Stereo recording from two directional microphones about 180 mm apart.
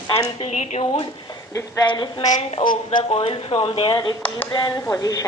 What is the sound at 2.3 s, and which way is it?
A woman's voice, 35° left (ahead or behind).